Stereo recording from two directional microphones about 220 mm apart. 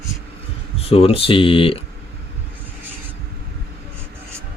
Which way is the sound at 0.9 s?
25° left (ahead or behind).